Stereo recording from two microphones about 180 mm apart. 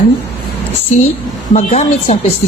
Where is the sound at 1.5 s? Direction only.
40° left (ahead or behind).